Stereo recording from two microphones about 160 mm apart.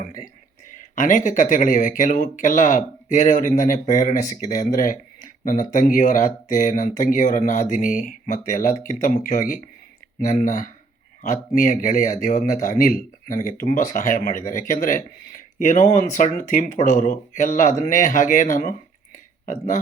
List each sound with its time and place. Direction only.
0.9 s speech: 55° left (ahead or behind)